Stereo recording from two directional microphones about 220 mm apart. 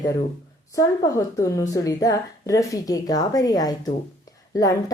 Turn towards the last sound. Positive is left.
turn(degrees=15)  # may be behind; listen again after turning